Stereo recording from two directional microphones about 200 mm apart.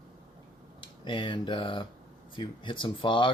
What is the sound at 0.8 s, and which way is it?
Speech, 25° left (ahead or behind).